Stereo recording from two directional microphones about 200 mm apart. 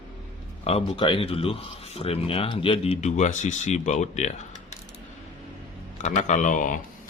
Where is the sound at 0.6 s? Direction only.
30° left (ahead or behind).